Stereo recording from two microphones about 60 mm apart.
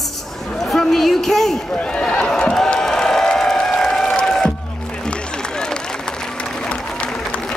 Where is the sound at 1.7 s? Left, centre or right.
Centre.